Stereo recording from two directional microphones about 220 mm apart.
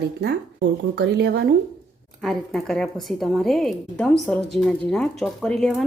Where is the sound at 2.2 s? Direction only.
Centre (ahead or behind).